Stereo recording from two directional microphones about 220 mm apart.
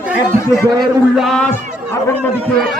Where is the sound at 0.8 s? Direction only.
Centre (ahead or behind).